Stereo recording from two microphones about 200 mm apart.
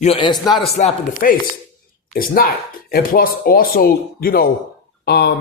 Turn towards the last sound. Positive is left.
turn(degrees=55)  # may be behind; listen again after turning